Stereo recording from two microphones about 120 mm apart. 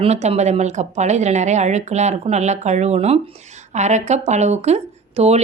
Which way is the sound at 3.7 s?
75° right (ahead or behind).